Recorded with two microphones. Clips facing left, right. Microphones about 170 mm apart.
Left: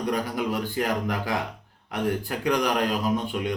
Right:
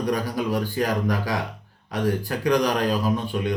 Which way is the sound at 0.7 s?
20° left (ahead or behind).